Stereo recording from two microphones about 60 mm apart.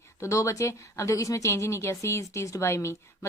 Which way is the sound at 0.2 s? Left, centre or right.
Left.